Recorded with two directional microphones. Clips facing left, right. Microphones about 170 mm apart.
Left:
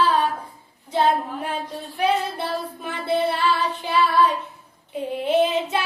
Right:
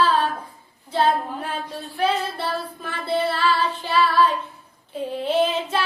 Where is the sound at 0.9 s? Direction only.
15° left (ahead or behind).